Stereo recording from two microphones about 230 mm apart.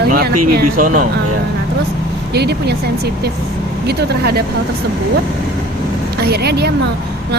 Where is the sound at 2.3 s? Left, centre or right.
Right.